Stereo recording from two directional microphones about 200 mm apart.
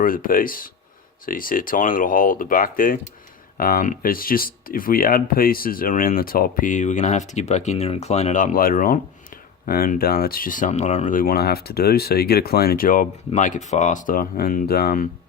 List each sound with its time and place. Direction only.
0.0 s speech: 45° left (ahead or behind)